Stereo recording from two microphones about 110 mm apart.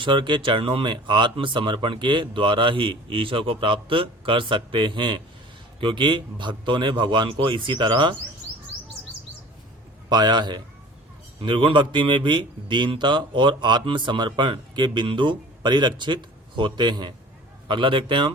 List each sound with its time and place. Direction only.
0.0 s a man's voice: 45° right (ahead or behind)
10.1 s a man's voice: 40° right (ahead or behind)